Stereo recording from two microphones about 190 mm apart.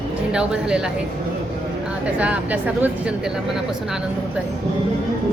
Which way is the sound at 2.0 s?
5° right (ahead or behind).